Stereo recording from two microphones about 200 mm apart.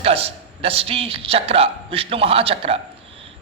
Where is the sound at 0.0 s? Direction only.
30° right (ahead or behind).